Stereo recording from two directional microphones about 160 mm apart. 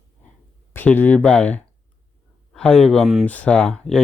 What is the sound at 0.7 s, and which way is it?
Speech, 10° left (ahead or behind).